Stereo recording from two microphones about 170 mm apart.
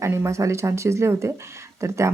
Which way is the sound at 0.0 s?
15° right (ahead or behind).